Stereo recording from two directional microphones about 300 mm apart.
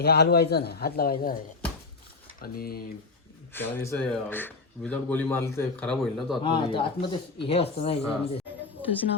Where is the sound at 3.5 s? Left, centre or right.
Centre.